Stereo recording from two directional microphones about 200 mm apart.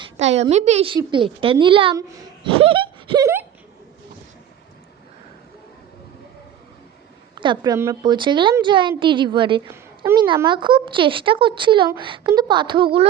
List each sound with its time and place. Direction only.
0.0 s a woman's voice: 35° right (ahead or behind); by 3.4 s 15° right (ahead or behind)
7.3 s a woman's voice: 25° right (ahead or behind)